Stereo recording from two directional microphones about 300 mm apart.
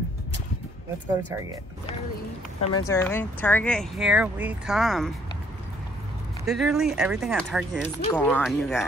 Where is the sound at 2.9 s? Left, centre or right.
Centre.